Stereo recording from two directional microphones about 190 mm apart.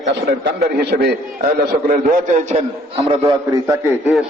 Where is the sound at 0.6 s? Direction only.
55° right (ahead or behind).